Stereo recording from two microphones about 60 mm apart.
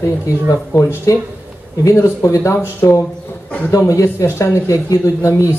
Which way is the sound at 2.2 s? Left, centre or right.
Left.